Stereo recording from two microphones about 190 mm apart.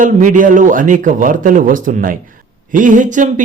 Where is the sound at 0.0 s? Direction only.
45° right (ahead or behind).